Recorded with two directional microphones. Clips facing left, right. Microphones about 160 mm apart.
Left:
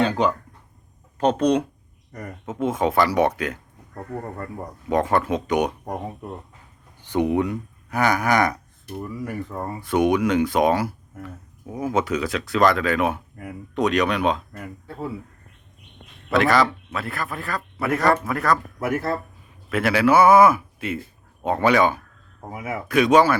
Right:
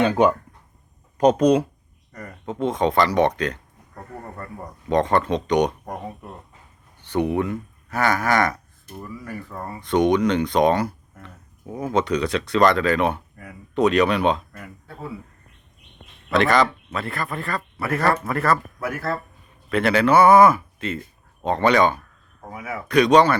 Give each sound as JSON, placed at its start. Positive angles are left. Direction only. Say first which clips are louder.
{"t": 0.0, "sound": "speech", "louder": "right 3 dB", "side_deg": -20}
{"t": 2.5, "sound": "speech", "louder": "right 1 dB", "side_deg": 5}
{"t": 4.9, "sound": "speech", "louder": "right 1 dB", "side_deg": 5}
{"t": 7.0, "sound": "speech", "louder": "left 1 dB", "side_deg": 15}
{"t": 9.8, "sound": "speech", "louder": "right 1 dB", "side_deg": 5}
{"t": 16.3, "sound": "speech", "louder": "even", "side_deg": 5}
{"t": 18.8, "sound": "speech", "louder": "left 3 dB", "side_deg": 25}
{"t": 19.7, "sound": "speech", "louder": "right 1 dB", "side_deg": 5}
{"t": 22.4, "sound": "speech", "louder": "left 2 dB", "side_deg": 20}
{"t": 22.9, "sound": "speech", "louder": "right 1 dB", "side_deg": 5}